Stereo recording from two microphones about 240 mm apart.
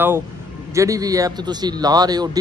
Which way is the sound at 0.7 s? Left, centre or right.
Centre.